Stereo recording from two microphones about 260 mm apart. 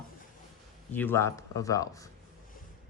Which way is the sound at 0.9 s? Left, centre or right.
Centre.